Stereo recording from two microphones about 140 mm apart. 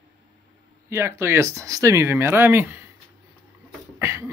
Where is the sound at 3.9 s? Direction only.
20° right (ahead or behind).